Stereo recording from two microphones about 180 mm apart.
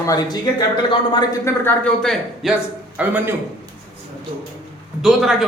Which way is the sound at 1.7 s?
5° left (ahead or behind).